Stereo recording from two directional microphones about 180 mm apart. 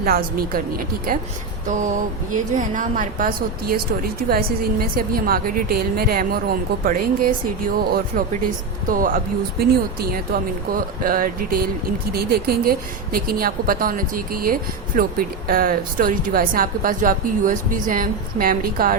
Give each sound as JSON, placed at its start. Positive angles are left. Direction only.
{"t": 0.0, "sound": "a woman's voice", "side_deg": -55}
{"t": 8.9, "sound": "a woman's voice", "side_deg": -50}